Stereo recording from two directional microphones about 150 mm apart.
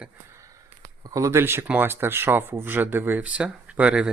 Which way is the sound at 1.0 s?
20° right (ahead or behind).